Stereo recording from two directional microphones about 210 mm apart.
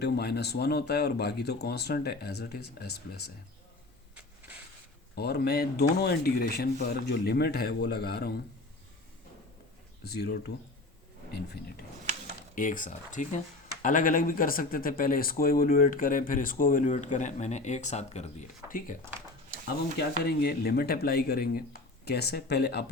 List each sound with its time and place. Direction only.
0.0 s speech: 50° left (ahead or behind)
4.1 s a sound: 5° right (ahead or behind)
5.1 s speech: 50° left (ahead or behind)
10.0 s speech: 50° left (ahead or behind)
12.5 s speech: 40° left (ahead or behind)
20.2 s speech: 45° left (ahead or behind)